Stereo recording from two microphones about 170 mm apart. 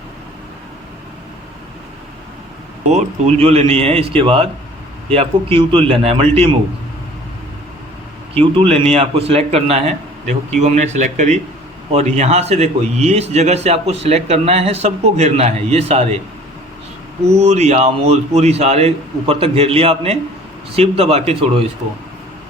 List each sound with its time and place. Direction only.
2.9 s a man's voice: 40° right (ahead or behind)
8.4 s a man's voice: 35° right (ahead or behind)
17.2 s a man's voice: 40° right (ahead or behind)